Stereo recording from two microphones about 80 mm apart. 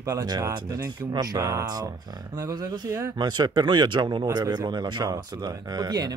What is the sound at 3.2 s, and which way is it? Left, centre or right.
Speech, right.